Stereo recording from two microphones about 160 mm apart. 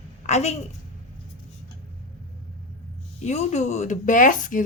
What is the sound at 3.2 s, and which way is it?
A woman's voice, 45° left (ahead or behind).